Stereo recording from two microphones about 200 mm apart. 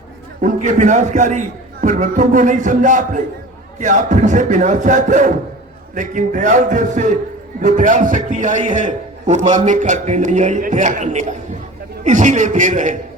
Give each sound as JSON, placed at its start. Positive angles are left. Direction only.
{"t": 0.4, "sound": "a man's voice", "side_deg": -40}